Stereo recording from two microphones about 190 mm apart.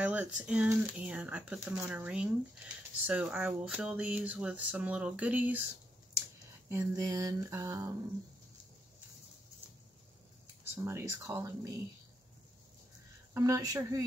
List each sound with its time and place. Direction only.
0.0 s speech: 5° right (ahead or behind)
6.7 s speech: 15° right (ahead or behind)
10.4 s speech: 15° right (ahead or behind)
13.3 s speech: 15° right (ahead or behind)